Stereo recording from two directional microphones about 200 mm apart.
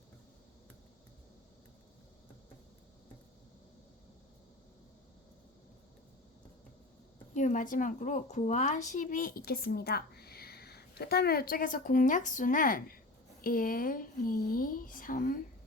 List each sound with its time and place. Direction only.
7.3 s speech: 40° left (ahead or behind)